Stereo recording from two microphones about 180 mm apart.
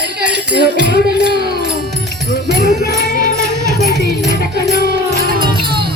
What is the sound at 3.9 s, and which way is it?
Music, 70° right (ahead or behind).